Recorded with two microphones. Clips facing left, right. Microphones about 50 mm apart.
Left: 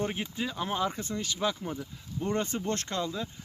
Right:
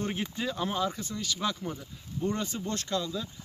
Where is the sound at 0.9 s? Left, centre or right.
Left.